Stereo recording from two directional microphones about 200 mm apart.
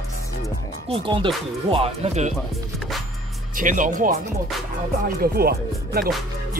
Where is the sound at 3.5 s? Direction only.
40° right (ahead or behind).